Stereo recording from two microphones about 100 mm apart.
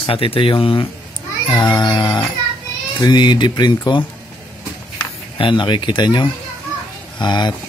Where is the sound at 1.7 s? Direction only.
40° left (ahead or behind).